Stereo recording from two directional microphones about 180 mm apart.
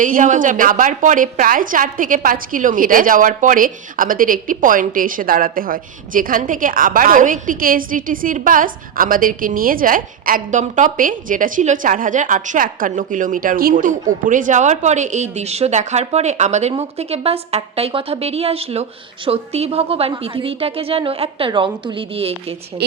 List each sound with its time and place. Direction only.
0.0 s a woman's voice: 45° right (ahead or behind)